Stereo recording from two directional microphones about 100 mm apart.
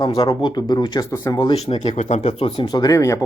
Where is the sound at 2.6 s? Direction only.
40° left (ahead or behind).